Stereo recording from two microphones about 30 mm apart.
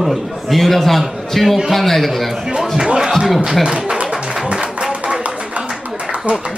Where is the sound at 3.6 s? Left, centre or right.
Right.